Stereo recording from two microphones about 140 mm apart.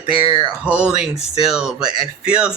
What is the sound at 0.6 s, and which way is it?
Speech, 5° right (ahead or behind).